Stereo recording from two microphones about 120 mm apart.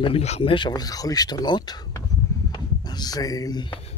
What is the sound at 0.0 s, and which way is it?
Speech, 60° left (ahead or behind).